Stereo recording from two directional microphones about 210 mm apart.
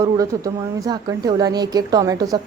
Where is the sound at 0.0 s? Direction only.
15° right (ahead or behind).